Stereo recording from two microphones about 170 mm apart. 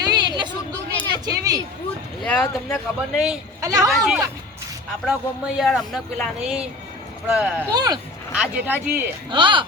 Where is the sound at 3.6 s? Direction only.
20° right (ahead or behind).